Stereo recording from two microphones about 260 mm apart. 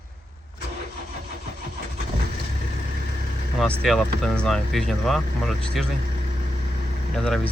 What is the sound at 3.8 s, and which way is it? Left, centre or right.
Speech, centre.